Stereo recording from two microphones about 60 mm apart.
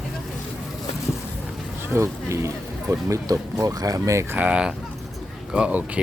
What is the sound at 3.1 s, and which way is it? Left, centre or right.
Speech, right.